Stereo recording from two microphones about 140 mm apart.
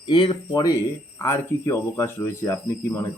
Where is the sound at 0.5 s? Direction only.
25° left (ahead or behind).